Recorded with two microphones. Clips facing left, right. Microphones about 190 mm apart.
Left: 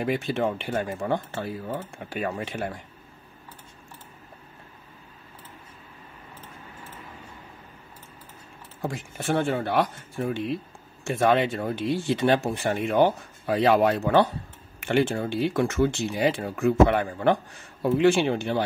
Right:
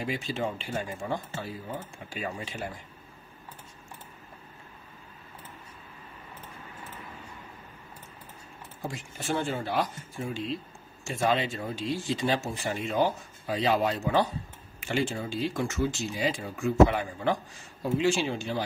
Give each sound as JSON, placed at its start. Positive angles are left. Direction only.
{"t": 0.0, "sound": "speech", "side_deg": 60}
{"t": 8.8, "sound": "speech", "side_deg": 60}